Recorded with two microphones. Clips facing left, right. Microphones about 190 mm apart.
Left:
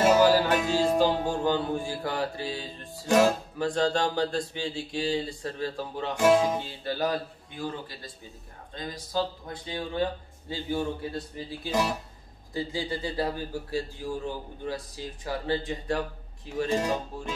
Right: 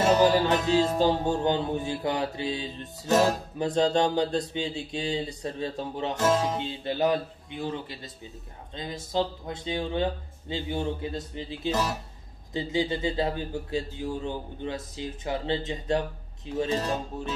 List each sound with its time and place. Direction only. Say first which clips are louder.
0.0 s music: left 1 dB; 10° left (ahead or behind)
1.0 s speech: right 1 dB; 20° right (ahead or behind)
6.1 s music: left 4 dB; 10° left (ahead or behind)
6.6 s speech: right 3 dB; 20° right (ahead or behind)